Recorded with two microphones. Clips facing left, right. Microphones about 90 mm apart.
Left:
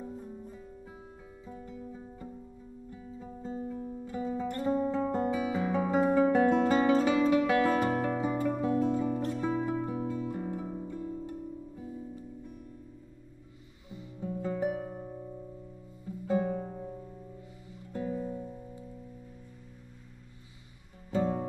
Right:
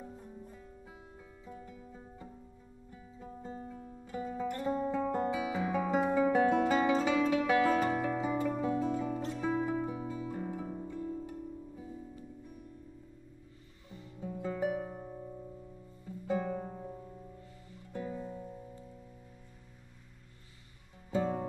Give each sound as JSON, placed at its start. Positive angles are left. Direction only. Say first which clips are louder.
{"t": 0.0, "sound": "music", "louder": "left 6 dB", "side_deg": 5}
{"t": 5.1, "sound": "guitar", "louder": "left 3 dB", "side_deg": 5}
{"t": 5.5, "sound": "music", "louder": "left 3 dB", "side_deg": -5}
{"t": 6.1, "sound": "guitar", "louder": "left 2 dB", "side_deg": -10}
{"t": 7.0, "sound": "music", "louder": "left 4 dB", "side_deg": 5}
{"t": 13.8, "sound": "music", "louder": "left 4 dB", "side_deg": 10}
{"t": 14.5, "sound": "harp", "louder": "left 1 dB", "side_deg": 5}
{"t": 16.3, "sound": "music", "louder": "left 4 dB", "side_deg": 5}
{"t": 21.1, "sound": "music", "louder": "left 2 dB", "side_deg": 0}